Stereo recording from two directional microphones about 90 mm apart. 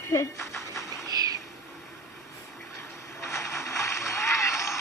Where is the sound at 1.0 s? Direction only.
45° right (ahead or behind).